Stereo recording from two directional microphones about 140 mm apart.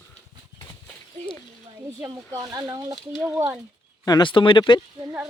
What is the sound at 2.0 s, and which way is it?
Speech, 25° right (ahead or behind).